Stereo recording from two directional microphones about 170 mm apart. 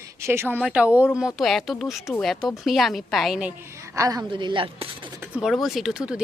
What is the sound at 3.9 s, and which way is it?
Speech, 20° right (ahead or behind).